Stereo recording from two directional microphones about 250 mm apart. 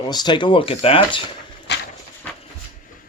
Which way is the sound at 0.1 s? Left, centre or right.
Centre.